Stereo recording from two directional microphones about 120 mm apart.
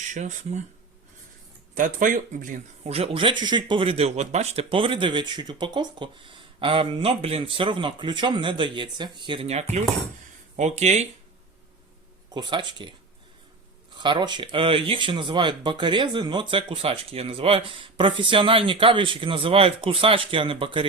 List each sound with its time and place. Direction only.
0.1 s speech: 90° right
1.7 s a man's voice: 90° right; by 9.5 s 45° right (ahead or behind)
9.5 s speech: 70° right (ahead or behind)
12.3 s speech: 40° right (ahead or behind)
13.9 s a man's voice: 40° right (ahead or behind)